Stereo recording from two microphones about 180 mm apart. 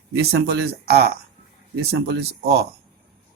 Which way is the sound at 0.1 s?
65° right (ahead or behind).